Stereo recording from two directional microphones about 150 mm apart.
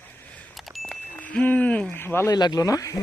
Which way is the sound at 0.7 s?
5° left (ahead or behind).